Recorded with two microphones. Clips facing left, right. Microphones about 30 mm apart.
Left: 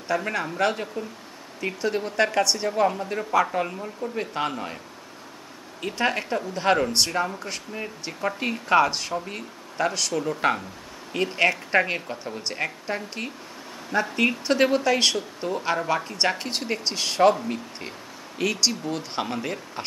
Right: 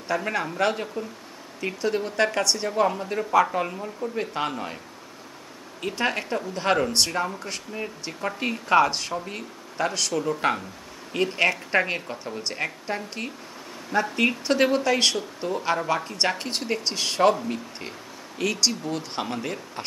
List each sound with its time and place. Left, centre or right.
0.1 s speech: centre
5.8 s speech: centre